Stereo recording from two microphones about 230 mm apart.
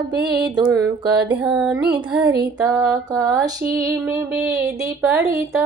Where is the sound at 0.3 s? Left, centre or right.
Centre.